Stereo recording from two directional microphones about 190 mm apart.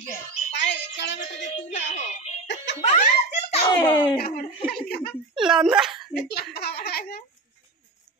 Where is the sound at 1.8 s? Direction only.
35° left (ahead or behind).